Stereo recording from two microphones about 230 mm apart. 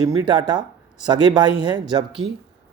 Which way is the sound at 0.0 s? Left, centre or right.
Centre.